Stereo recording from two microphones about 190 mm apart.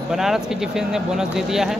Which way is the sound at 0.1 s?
Centre (ahead or behind).